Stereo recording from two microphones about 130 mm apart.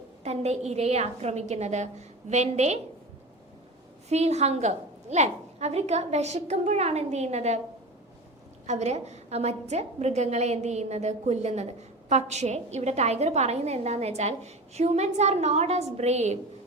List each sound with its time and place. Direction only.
0.3 s a woman's voice: 55° right (ahead or behind)
4.1 s a woman's voice: 60° right (ahead or behind)
8.6 s a woman's voice: 60° right (ahead or behind)